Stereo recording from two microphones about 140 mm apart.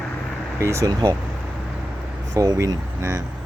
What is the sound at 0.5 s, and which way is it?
Speech, 20° right (ahead or behind).